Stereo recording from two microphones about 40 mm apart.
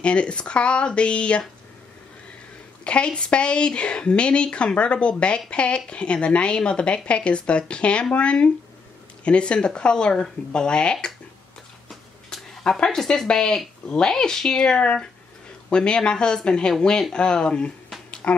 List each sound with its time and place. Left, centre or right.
0.0 s speech: left
2.8 s speech: left
11.9 s a sound: centre
12.6 s speech: centre
18.2 s speech: left